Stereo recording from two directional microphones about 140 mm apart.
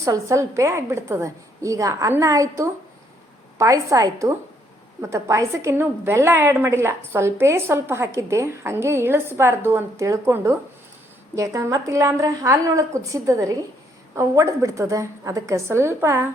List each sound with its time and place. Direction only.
0.0 s a woman's voice: 20° right (ahead or behind)